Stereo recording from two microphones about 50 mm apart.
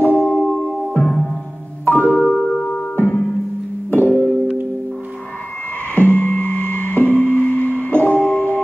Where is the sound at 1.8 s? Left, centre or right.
Left.